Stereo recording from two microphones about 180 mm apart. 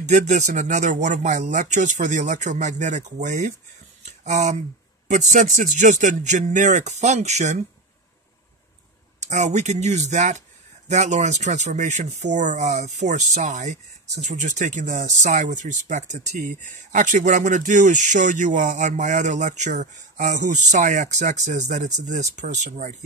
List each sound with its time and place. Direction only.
0.0 s speech: 40° right (ahead or behind)
4.0 s a sound: 40° right (ahead or behind)
5.3 s speech: 45° right (ahead or behind)
9.2 s speech: 40° right (ahead or behind)